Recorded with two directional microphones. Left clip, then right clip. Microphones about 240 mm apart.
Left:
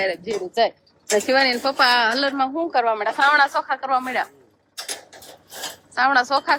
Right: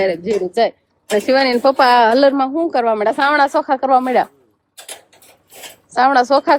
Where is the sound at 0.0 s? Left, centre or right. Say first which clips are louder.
Right 7 dB; right.